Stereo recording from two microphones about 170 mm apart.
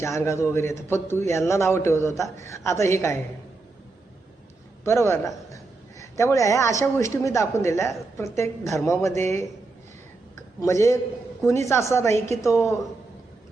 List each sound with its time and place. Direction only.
0.0 s a woman's voice: 15° left (ahead or behind)
4.8 s a man's voice: 15° left (ahead or behind)
10.6 s a woman's voice: 20° left (ahead or behind)